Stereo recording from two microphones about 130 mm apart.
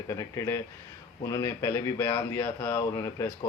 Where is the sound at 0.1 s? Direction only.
25° left (ahead or behind).